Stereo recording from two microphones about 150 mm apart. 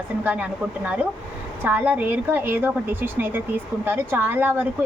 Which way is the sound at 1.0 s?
10° right (ahead or behind).